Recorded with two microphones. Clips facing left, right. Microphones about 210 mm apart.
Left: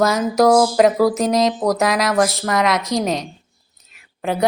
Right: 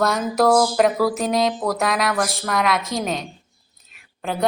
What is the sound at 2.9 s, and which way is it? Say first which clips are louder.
Speech: left 5 dB; 20° left (ahead or behind).